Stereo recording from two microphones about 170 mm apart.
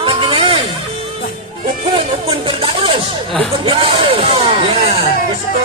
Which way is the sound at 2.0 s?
35° right (ahead or behind).